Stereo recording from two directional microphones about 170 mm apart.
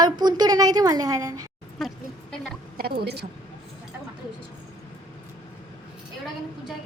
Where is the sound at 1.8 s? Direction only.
Centre (ahead or behind).